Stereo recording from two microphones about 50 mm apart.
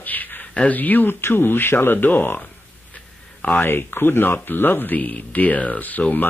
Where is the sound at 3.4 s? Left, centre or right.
Left.